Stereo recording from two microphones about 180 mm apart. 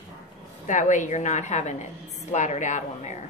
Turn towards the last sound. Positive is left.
turn(degrees=40)  # may be behind; listen again after turning